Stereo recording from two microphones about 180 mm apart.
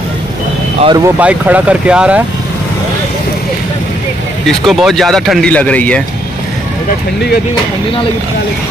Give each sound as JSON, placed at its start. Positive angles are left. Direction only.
{"t": 0.8, "sound": "speech", "side_deg": -20}
{"t": 1.2, "sound": "speech", "side_deg": -5}
{"t": 4.5, "sound": "speech", "side_deg": 0}